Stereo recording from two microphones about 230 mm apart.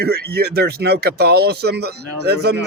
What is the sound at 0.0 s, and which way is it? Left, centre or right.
Speech, right.